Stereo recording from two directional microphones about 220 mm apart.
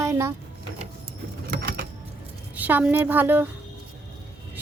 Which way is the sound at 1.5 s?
45° right (ahead or behind).